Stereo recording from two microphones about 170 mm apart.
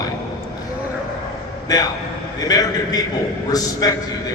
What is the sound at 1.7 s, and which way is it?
A man's voice, 25° left (ahead or behind).